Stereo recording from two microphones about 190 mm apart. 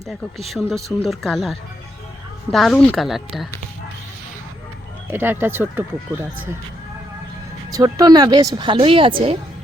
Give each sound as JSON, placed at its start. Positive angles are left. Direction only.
{"t": 0.1, "sound": "speech", "side_deg": 0}
{"t": 5.1, "sound": "speech", "side_deg": -10}
{"t": 7.7, "sound": "a woman's voice", "side_deg": -20}